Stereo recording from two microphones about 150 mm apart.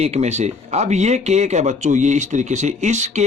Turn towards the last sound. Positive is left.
turn(degrees=-50)  # may be behind; listen again after turning